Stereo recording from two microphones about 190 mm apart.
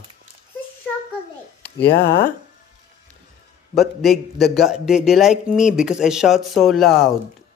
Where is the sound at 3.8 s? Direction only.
Centre (ahead or behind).